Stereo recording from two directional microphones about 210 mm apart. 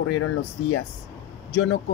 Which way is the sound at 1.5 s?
60° left (ahead or behind).